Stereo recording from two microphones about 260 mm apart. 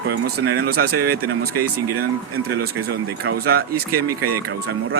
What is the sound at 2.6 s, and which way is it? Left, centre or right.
Speech, right.